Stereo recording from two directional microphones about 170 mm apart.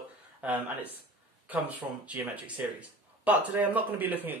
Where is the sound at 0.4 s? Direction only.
10° right (ahead or behind).